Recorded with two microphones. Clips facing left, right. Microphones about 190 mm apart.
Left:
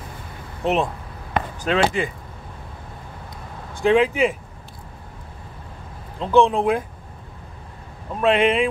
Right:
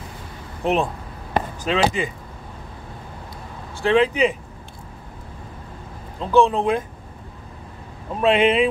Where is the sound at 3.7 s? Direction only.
15° left (ahead or behind).